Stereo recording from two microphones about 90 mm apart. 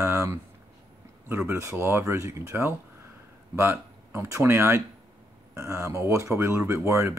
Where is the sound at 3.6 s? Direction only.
25° right (ahead or behind).